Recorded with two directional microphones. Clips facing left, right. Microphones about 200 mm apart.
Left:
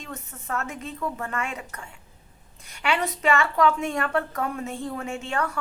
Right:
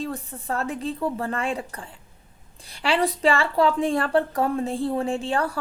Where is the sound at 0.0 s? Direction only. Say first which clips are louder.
Right 8 dB; 35° right (ahead or behind).